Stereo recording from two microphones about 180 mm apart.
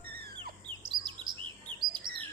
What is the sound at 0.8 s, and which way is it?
Chirp, 25° right (ahead or behind).